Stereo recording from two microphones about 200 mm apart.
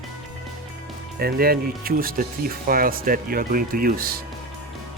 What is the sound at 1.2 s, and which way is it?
Speech, 50° right (ahead or behind).